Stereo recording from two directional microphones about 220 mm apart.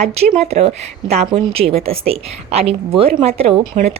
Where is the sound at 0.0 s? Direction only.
30° right (ahead or behind).